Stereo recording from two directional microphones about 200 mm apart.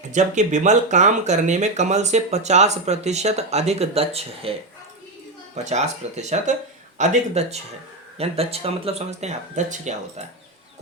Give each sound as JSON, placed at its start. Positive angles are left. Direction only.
{"t": 0.0, "sound": "speech", "side_deg": -35}
{"t": 5.6, "sound": "speech", "side_deg": -35}